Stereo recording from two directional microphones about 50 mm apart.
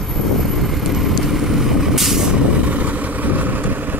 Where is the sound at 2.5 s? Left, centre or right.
Right.